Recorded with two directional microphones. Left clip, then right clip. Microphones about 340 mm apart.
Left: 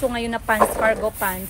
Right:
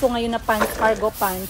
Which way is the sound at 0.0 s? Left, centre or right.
Centre.